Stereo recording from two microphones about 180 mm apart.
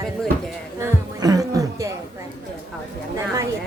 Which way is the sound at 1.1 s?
20° right (ahead or behind).